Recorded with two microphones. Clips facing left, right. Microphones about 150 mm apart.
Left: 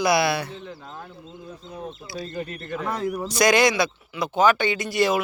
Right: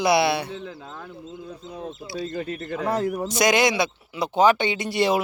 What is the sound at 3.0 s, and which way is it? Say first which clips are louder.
Speech: right 2 dB; 35° right (ahead or behind).